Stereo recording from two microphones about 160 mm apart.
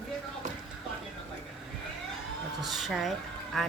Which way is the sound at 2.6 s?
Centre (ahead or behind).